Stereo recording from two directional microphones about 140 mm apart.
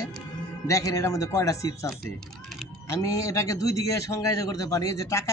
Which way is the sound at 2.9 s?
20° left (ahead or behind).